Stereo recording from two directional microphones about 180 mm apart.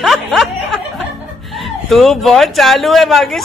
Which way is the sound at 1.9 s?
Centre (ahead or behind).